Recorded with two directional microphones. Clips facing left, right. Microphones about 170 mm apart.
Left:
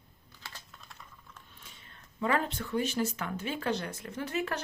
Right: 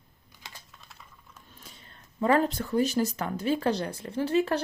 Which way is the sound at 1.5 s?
40° right (ahead or behind).